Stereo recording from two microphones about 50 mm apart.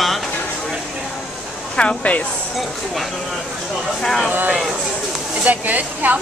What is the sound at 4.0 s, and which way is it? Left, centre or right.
Speech, centre.